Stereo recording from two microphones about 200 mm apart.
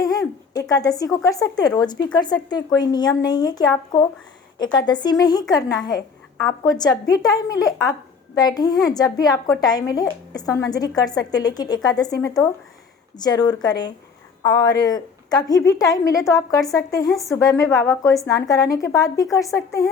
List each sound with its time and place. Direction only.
0.0 s a woman's voice: 20° left (ahead or behind)